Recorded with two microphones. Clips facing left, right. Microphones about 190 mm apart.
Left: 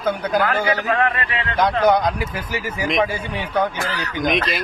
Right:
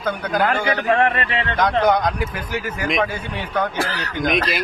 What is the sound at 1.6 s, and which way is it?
Speech, 10° left (ahead or behind).